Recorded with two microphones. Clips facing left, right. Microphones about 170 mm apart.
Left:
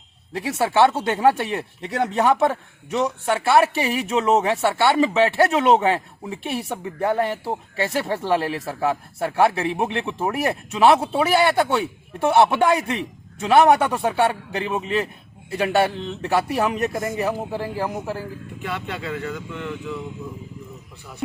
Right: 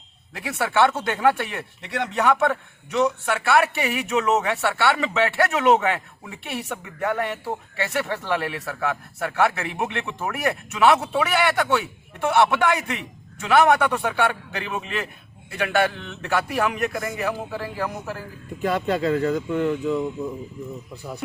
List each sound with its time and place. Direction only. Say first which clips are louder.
0.3 s a man's voice: left 3 dB; 30° left (ahead or behind)
18.6 s speech: right 8 dB; 40° right (ahead or behind)